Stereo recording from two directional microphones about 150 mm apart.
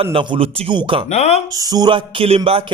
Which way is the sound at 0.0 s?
35° right (ahead or behind).